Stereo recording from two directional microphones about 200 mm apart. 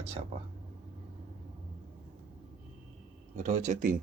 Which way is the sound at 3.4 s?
40° right (ahead or behind).